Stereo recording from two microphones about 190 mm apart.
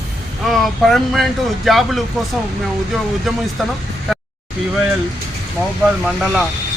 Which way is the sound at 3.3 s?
Centre (ahead or behind).